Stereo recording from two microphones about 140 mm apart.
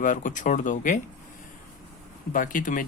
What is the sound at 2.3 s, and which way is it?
Speech, 75° left (ahead or behind).